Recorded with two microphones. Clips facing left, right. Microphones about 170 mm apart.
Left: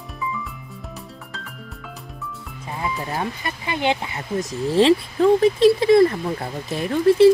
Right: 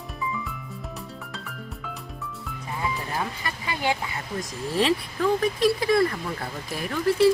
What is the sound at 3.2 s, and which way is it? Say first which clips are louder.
Speech: left 3 dB; 25° left (ahead or behind).